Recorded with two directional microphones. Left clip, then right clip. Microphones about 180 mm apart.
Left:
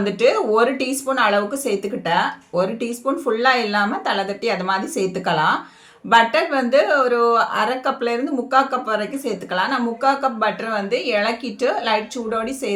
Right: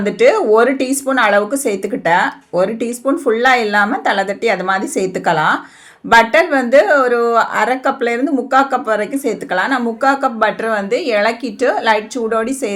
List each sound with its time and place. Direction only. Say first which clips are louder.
0.0 s speech: right 5 dB; 40° right (ahead or behind)